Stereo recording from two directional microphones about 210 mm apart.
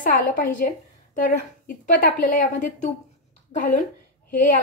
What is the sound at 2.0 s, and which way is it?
A woman's voice, 40° left (ahead or behind).